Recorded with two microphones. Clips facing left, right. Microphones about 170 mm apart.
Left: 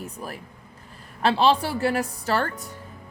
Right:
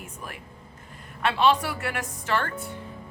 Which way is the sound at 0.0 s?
35° left (ahead or behind).